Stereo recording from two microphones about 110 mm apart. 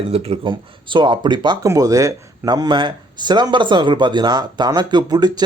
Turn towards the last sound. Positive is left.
turn(degrees=-40)  # may be behind; listen again after turning